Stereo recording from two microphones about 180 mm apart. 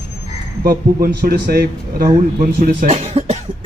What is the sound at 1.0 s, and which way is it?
A man's voice, 55° right (ahead or behind).